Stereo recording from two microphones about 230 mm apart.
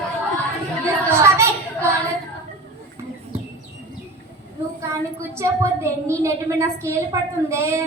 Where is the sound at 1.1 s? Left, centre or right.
Centre.